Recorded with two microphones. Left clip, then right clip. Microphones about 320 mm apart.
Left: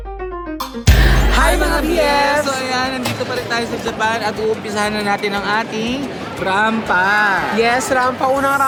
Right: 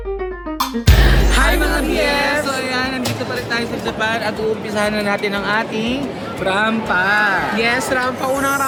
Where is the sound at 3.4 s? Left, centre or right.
Centre.